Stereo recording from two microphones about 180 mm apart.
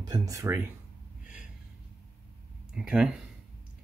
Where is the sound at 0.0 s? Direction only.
20° right (ahead or behind).